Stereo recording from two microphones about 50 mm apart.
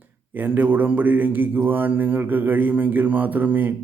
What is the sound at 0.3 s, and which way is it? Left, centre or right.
Speech, right.